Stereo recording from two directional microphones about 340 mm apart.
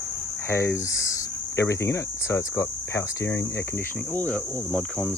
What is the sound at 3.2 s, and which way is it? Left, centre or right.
Speech, left.